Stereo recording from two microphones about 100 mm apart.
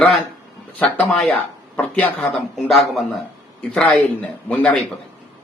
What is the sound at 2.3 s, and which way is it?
Speech, centre (ahead or behind).